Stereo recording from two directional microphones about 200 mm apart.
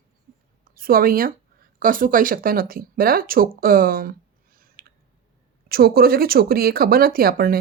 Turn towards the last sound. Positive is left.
turn(degrees=-45)  # may be behind; listen again after turning